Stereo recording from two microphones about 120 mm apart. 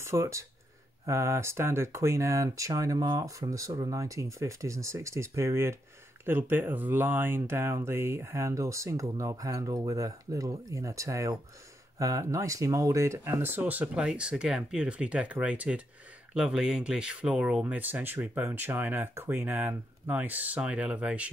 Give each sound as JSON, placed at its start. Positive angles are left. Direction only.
{"t": 0.0, "sound": "speech", "side_deg": -25}